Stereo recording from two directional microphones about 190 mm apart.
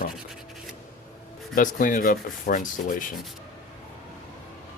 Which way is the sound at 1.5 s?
45° left (ahead or behind).